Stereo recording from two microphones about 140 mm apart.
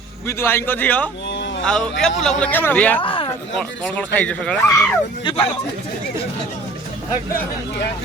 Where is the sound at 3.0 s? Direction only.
40° left (ahead or behind).